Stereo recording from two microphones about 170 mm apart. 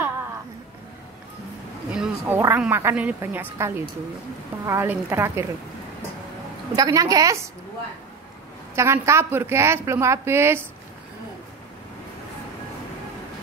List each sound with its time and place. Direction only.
1.9 s a woman's voice: 10° right (ahead or behind)
6.7 s a woman's voice: 20° right (ahead or behind)
8.7 s a woman's voice: 15° right (ahead or behind)